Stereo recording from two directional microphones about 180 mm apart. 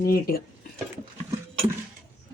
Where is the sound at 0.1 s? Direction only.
55° left (ahead or behind).